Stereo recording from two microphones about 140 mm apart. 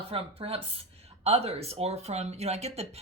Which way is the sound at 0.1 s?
45° right (ahead or behind).